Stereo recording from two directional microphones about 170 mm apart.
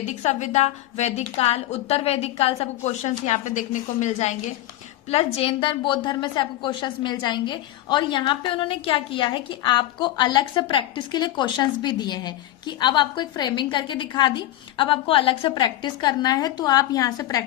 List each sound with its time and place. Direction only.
0.0 s a woman's voice: 45° left (ahead or behind)
5.1 s a woman's voice: 35° left (ahead or behind)